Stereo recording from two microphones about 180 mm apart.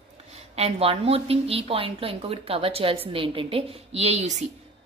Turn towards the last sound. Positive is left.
turn(degrees=-40)  # may be behind; listen again after turning